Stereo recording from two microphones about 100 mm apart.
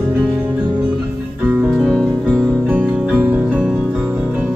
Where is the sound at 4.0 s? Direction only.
15° right (ahead or behind).